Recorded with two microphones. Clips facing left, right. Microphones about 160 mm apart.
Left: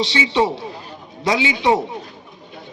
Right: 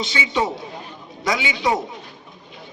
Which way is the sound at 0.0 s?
30° left (ahead or behind).